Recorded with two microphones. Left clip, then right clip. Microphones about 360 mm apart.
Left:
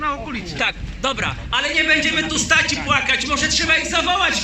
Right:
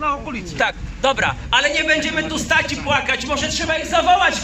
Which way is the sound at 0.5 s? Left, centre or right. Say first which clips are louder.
Right 2 dB; right.